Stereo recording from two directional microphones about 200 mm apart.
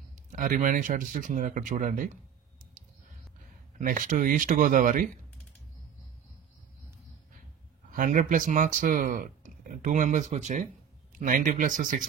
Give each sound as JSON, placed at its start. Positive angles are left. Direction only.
{"t": 0.3, "sound": "speech", "side_deg": -40}
{"t": 3.7, "sound": "speech", "side_deg": -40}
{"t": 7.9, "sound": "speech", "side_deg": -40}